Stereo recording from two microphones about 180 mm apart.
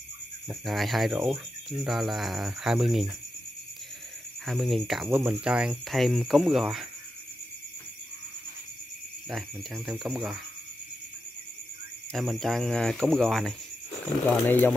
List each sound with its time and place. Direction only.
0.5 s speech: centre (ahead or behind)
4.5 s speech: centre (ahead or behind)
9.3 s speech: centre (ahead or behind)
12.1 s speech: centre (ahead or behind)